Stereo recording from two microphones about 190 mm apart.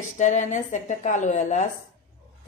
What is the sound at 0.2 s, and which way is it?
Speech, 40° left (ahead or behind).